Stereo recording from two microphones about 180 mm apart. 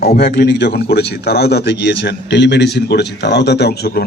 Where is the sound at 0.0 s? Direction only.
60° left (ahead or behind).